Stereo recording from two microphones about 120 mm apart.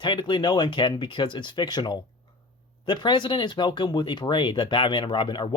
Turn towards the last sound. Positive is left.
turn(degrees=40)  # may be behind; listen again after turning